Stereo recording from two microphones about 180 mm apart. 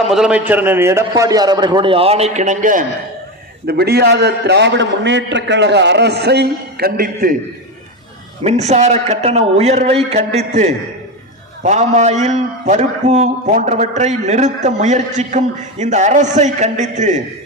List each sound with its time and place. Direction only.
0.1 s a man's voice: 5° right (ahead or behind); by 2.8 s 45° right (ahead or behind)
3.7 s a man's voice: 65° right (ahead or behind)
8.4 s a man's voice: 40° right (ahead or behind)